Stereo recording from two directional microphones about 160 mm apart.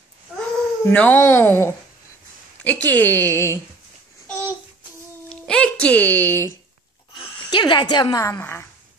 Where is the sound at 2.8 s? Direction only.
10° left (ahead or behind).